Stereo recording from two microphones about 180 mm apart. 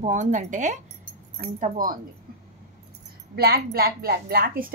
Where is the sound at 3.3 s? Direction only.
60° right (ahead or behind).